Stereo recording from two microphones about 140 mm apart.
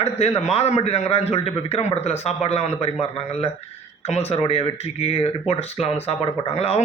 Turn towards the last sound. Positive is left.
turn(degrees=45)  # may be behind; listen again after turning